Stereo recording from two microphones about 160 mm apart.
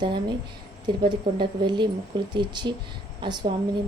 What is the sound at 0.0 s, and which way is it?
A woman's voice, 30° right (ahead or behind).